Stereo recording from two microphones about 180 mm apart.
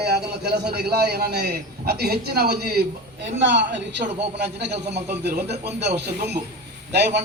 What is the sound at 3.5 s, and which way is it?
A man's voice, 75° right (ahead or behind).